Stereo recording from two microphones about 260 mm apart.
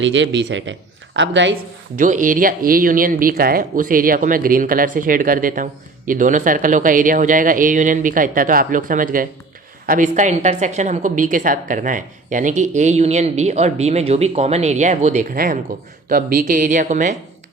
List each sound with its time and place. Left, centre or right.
0.0 s speech: right
2.0 s a woman's voice: right